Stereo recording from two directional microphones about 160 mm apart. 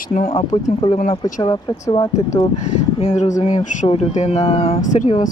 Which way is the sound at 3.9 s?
40° left (ahead or behind).